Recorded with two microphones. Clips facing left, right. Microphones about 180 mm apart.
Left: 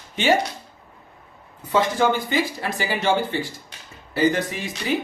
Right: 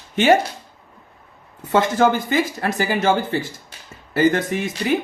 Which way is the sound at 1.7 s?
45° right (ahead or behind).